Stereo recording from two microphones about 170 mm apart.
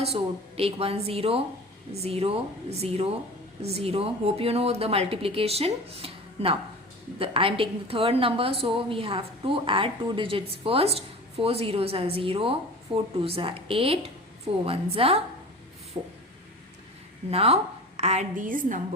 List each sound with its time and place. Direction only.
0.0 s a woman's voice: 35° right (ahead or behind)
17.3 s a woman's voice: 35° right (ahead or behind); by 18.8 s 50° right (ahead or behind)